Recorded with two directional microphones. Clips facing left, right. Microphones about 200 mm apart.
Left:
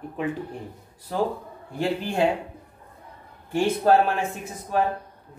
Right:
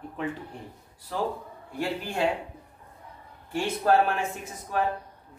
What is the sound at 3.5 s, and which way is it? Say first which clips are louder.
Speech: left 5 dB; 20° left (ahead or behind).